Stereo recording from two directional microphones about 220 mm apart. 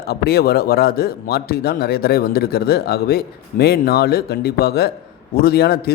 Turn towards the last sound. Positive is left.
turn(degrees=45)  # may be behind; listen again after turning